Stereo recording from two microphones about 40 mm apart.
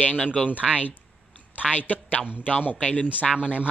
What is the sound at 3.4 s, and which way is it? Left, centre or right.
Speech, right.